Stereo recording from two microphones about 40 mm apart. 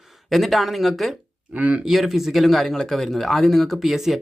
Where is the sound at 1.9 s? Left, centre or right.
Centre.